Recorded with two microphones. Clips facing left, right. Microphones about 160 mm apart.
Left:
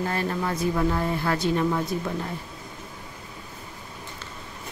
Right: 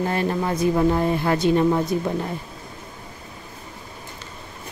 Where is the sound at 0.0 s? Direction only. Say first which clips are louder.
Right 4 dB; 20° right (ahead or behind).